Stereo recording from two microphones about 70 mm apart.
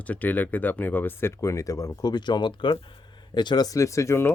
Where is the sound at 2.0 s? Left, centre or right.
Left.